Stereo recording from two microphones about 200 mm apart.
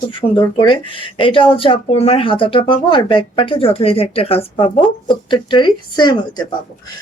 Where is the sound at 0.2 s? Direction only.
25° left (ahead or behind).